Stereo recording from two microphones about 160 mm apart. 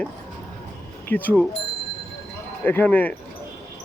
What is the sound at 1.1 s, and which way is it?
Speech, 10° left (ahead or behind).